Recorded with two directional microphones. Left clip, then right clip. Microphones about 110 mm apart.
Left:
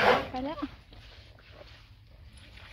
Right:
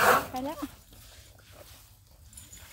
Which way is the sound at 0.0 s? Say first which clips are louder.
Right 1 dB; 35° right (ahead or behind).